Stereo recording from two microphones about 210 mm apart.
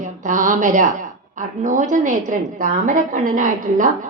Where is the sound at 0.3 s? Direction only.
40° right (ahead or behind).